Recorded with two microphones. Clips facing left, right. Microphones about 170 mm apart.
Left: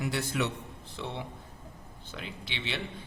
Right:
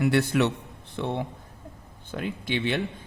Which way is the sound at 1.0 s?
55° right (ahead or behind).